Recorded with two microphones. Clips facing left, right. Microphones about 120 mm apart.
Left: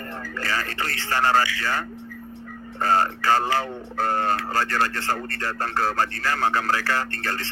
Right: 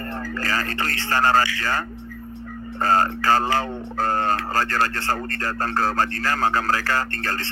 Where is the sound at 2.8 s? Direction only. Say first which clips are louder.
Right 1 dB; 40° right (ahead or behind).